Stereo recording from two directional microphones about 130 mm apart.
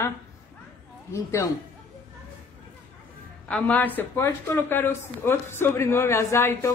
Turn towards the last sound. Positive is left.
turn(degrees=20)  # may be behind; listen again after turning